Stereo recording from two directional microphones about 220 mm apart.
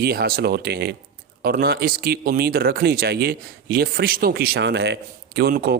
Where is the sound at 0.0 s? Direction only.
45° right (ahead or behind).